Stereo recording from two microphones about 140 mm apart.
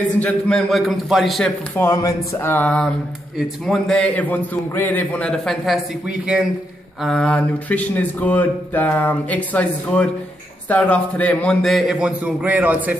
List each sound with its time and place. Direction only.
0.2 s a man's voice: 5° left (ahead or behind)
1.8 s speech: 20° left (ahead or behind)
3.3 s a man's voice: centre (ahead or behind)